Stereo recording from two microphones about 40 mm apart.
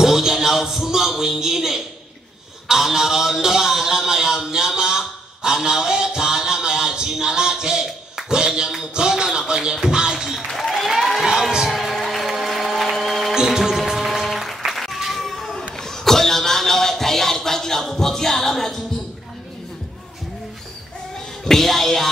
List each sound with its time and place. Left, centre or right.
0.0 s a sound: centre
2.7 s a man's voice: centre
9.4 s a sound: centre
10.5 s applause: centre
11.2 s music: centre
12.3 s a sound: centre
13.3 s music: centre
15.1 s cat: centre
15.7 s music: centre
21.5 s music: centre